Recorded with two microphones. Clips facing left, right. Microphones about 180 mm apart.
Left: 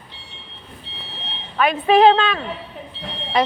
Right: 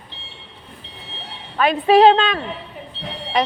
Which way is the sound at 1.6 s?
30° right (ahead or behind).